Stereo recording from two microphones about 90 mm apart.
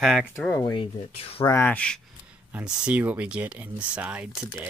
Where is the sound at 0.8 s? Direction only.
90° left.